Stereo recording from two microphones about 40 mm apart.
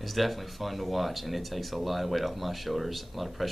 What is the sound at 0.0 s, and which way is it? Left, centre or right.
Speech, centre.